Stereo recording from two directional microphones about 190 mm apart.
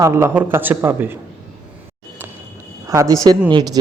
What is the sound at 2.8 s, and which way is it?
Speech, 15° right (ahead or behind).